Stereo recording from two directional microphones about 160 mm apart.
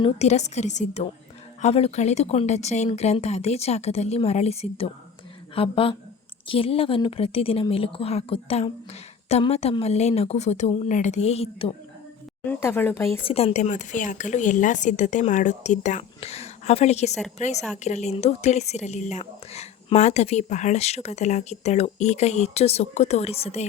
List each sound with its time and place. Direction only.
0.0 s a woman's voice: 45° left (ahead or behind)
12.5 s speech: 15° left (ahead or behind)
13.2 s speech: 40° left (ahead or behind)